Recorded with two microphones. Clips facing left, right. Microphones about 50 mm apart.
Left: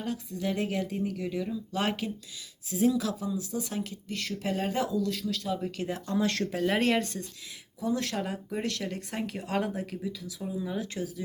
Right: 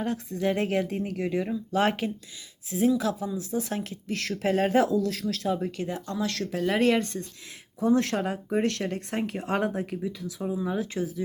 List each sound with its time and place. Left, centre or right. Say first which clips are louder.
0.0 s speech: right 5 dB; right
5.0 s speech: right 2 dB; right
5.5 s speech: right 6 dB; right
6.1 s speech: left 3 dB; left
6.6 s speech: right 4 dB; centre
7.8 s speech: right 7 dB; right
10.2 s speech: right 5 dB; right